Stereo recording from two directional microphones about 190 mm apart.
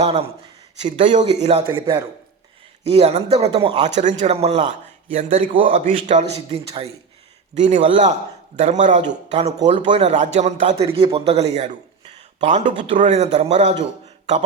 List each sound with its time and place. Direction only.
0.0 s a man's voice: 30° right (ahead or behind)
1.7 s a man's voice: 15° right (ahead or behind)
2.8 s a man's voice: 30° right (ahead or behind)
3.8 s a man's voice: 35° right (ahead or behind)
5.5 s a man's voice: 30° right (ahead or behind)
5.8 s a man's voice: 40° right (ahead or behind)